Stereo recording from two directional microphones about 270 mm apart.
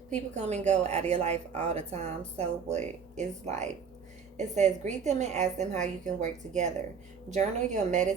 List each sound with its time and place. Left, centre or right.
0.1 s a woman's voice: right